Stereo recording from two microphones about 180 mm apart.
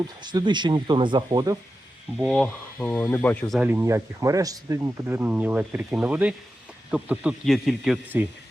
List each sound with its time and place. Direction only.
0.2 s speech: 25° right (ahead or behind)
2.1 s speech: centre (ahead or behind)
3.6 s speech: 15° right (ahead or behind)